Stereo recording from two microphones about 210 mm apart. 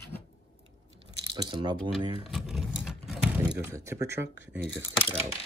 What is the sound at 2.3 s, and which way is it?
Speech, centre (ahead or behind).